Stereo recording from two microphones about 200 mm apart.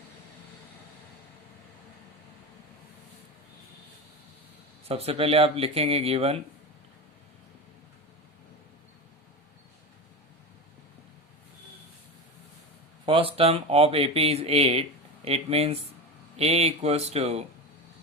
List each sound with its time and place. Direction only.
4.9 s speech: 30° right (ahead or behind)
13.1 s speech: 25° right (ahead or behind)